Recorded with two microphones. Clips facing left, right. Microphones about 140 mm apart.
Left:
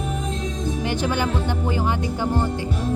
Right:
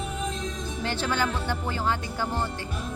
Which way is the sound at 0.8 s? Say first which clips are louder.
Left 3 dB; 15° left (ahead or behind).